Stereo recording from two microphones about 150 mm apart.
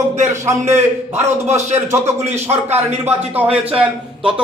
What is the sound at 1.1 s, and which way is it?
Speech, 50° right (ahead or behind).